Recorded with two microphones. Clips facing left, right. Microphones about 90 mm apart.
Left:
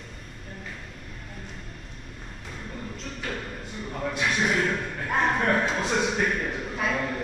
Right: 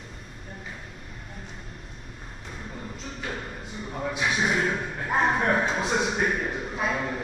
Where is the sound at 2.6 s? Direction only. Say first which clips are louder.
Left 1 dB; centre (ahead or behind).